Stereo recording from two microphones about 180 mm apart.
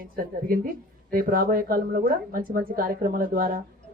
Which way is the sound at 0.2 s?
50° right (ahead or behind).